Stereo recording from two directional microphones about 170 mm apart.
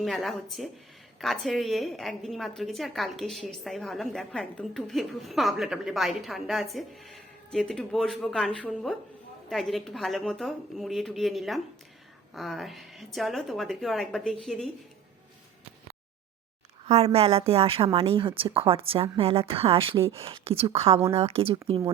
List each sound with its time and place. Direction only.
0.0 s a woman's voice: centre (ahead or behind)
16.8 s a woman's voice: 35° right (ahead or behind)